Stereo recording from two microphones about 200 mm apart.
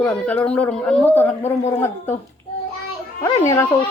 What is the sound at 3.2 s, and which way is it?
Speech, 15° left (ahead or behind).